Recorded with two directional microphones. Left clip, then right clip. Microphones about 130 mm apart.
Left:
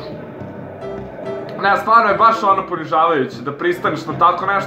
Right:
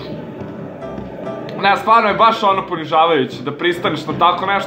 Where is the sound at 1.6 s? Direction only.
40° right (ahead or behind).